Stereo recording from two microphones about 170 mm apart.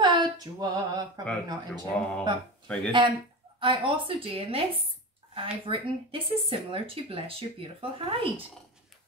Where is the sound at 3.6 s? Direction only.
30° right (ahead or behind).